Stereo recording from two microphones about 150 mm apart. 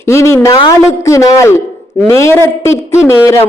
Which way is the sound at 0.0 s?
20° left (ahead or behind).